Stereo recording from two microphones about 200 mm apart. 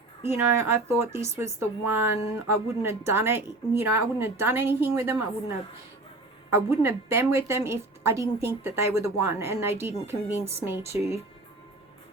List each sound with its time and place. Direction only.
0.2 s a woman's voice: 15° right (ahead or behind)
6.5 s a woman's voice: 10° right (ahead or behind)
10.9 s speech: 30° left (ahead or behind)